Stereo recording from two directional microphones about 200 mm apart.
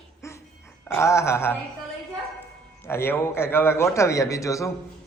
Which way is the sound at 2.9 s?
10° left (ahead or behind).